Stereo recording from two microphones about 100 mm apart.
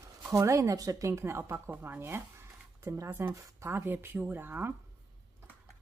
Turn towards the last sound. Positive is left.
turn(degrees=-20)  # may be behind; listen again after turning